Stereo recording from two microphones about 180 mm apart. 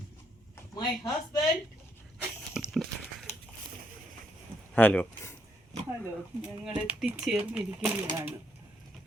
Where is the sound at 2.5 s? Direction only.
Centre (ahead or behind).